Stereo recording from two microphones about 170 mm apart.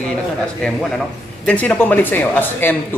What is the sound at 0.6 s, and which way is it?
A man's voice, 5° left (ahead or behind).